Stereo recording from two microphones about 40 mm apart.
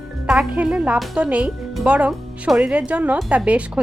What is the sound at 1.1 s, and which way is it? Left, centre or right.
A woman's voice, right.